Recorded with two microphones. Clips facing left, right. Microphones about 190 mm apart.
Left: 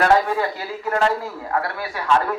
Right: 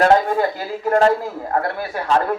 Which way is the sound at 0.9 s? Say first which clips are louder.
Right 5 dB; 40° right (ahead or behind).